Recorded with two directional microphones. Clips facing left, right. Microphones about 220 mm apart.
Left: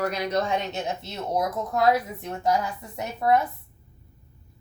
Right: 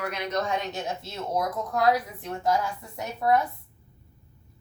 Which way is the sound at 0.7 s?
20° left (ahead or behind).